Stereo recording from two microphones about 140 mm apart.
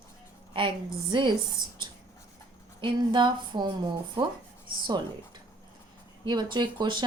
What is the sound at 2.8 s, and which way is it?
Speech, 35° right (ahead or behind).